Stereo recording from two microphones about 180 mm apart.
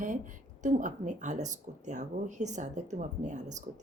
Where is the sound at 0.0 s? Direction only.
45° right (ahead or behind).